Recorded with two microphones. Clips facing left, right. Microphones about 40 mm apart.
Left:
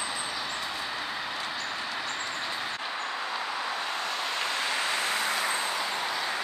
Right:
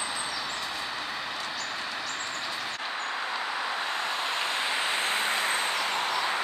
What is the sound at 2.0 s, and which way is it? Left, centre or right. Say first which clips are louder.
Vehicle: left 1 dB; centre.